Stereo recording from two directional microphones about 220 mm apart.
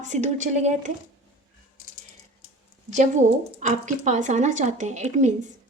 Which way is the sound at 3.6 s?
35° right (ahead or behind).